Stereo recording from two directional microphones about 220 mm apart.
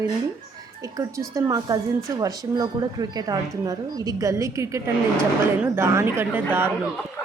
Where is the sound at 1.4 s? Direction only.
15° right (ahead or behind).